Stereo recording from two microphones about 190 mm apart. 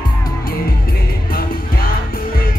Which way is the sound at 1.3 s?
50° left (ahead or behind).